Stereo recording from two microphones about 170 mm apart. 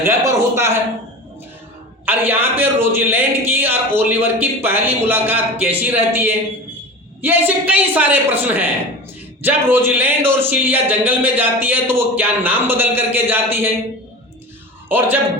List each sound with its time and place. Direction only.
0.0 s a man's voice: 15° right (ahead or behind)
2.0 s a man's voice: 10° right (ahead or behind)
14.8 s a man's voice: 10° right (ahead or behind)